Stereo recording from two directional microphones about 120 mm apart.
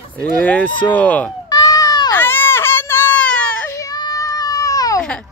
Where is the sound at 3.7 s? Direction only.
30° left (ahead or behind).